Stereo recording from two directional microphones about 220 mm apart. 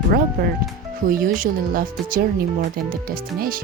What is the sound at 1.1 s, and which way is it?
Speech, 40° right (ahead or behind).